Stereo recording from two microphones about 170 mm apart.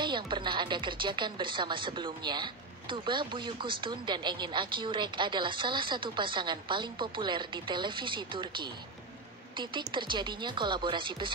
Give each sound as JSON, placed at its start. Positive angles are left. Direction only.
{"t": 0.0, "sound": "speech", "side_deg": -25}